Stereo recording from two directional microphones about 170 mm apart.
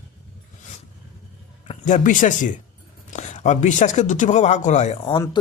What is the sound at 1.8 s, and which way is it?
Speech, 50° left (ahead or behind).